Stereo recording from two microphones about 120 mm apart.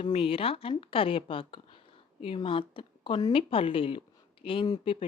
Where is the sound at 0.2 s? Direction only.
50° left (ahead or behind).